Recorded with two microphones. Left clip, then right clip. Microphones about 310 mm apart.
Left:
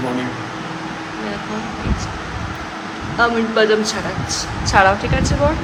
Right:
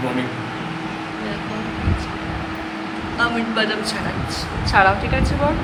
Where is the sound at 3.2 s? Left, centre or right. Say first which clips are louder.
Left 5 dB; centre.